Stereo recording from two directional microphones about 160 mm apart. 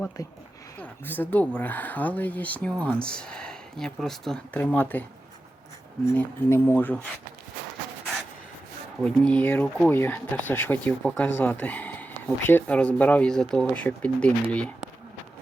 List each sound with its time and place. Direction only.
0.2 s speech: 20° left (ahead or behind)
0.8 s speech: 10° left (ahead or behind)
6.1 s speech: 15° left (ahead or behind)
9.0 s speech: 5° left (ahead or behind)